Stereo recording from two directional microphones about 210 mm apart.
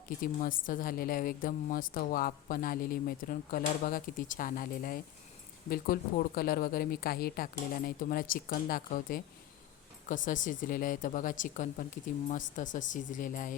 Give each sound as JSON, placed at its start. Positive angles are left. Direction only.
{"t": 0.2, "sound": "a woman's voice", "side_deg": 40}